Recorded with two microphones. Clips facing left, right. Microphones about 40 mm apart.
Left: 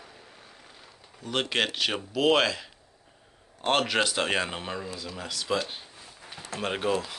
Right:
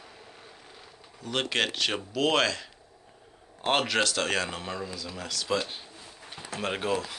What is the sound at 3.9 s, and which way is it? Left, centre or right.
Speech, centre.